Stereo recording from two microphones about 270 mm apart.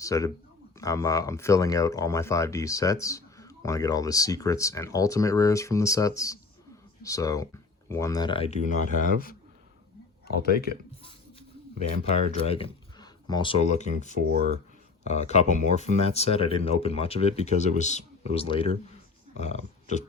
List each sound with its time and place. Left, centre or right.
0.0 s speech: centre; by 10.7 s left
12.3 s speech: left
14.3 s speech: right
15.0 s speech: left